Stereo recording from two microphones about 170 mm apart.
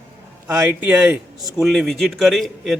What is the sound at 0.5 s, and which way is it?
A man's voice, 10° right (ahead or behind).